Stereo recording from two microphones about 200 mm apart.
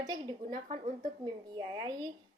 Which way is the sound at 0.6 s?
40° right (ahead or behind).